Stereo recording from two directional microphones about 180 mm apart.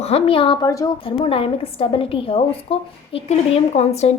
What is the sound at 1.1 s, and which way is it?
A woman's voice, 30° left (ahead or behind).